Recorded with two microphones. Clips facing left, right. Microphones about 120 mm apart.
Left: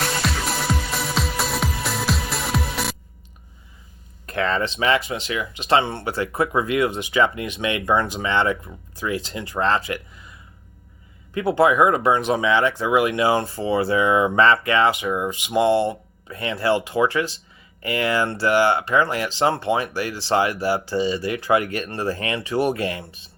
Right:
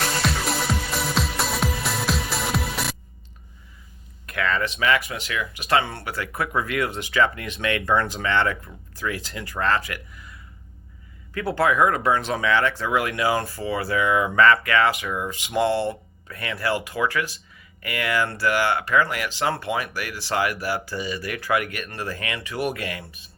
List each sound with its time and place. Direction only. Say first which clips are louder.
0.2 s music: even; centre (ahead or behind)
4.3 s speech: left 2 dB; 30° left (ahead or behind)
11.3 s speech: left 4 dB; 20° left (ahead or behind)